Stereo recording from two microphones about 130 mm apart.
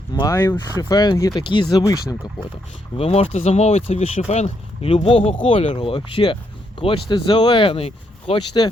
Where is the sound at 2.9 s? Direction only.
50° left (ahead or behind).